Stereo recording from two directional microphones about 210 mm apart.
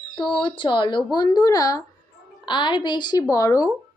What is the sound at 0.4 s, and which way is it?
A woman's voice, 20° left (ahead or behind).